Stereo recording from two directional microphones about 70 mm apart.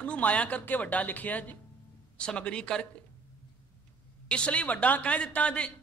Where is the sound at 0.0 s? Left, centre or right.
Centre.